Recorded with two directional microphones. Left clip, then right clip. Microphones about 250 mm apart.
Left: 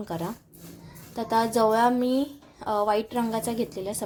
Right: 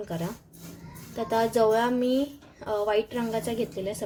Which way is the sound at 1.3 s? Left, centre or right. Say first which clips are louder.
Left 1 dB; centre.